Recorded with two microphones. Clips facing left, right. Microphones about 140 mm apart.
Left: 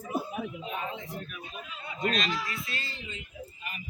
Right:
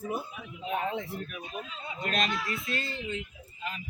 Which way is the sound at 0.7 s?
65° right (ahead or behind).